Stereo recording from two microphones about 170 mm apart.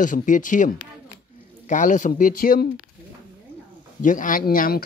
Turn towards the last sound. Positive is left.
turn(degrees=60)  # may be behind; listen again after turning